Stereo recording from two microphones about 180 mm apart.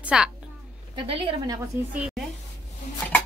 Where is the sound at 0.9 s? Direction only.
30° right (ahead or behind).